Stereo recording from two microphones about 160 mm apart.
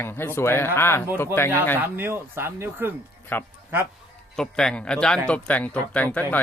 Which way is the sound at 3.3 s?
10° left (ahead or behind).